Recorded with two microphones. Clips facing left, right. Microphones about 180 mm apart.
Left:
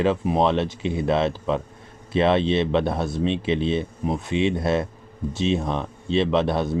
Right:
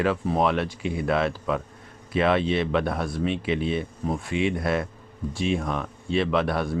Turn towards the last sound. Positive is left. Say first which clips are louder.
# left 3 dB
turn(degrees=25)  # may be behind; listen again after turning